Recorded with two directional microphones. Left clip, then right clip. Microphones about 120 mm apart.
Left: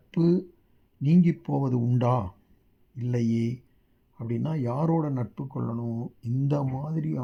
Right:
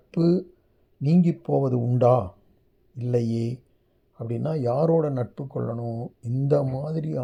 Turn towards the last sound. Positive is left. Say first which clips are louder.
# right 5 dB
turn(degrees=-15)  # may be behind; listen again after turning